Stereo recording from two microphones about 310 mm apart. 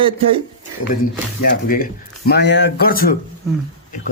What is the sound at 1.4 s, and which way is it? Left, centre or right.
Speech, left.